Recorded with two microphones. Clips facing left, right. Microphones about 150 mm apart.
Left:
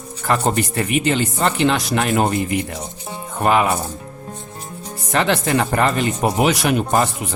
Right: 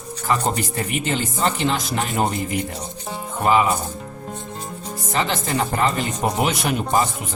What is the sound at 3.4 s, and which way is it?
Speech, 70° left (ahead or behind).